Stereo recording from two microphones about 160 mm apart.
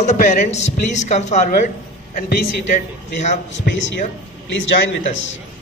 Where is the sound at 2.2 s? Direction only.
70° left (ahead or behind).